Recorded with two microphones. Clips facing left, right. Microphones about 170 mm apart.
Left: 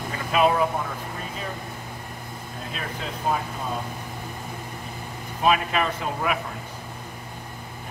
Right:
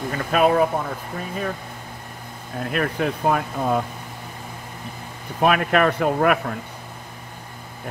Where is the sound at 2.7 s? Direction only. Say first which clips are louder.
Right 11 dB; 65° right (ahead or behind).